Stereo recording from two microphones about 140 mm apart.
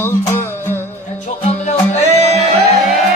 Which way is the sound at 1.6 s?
55° left (ahead or behind).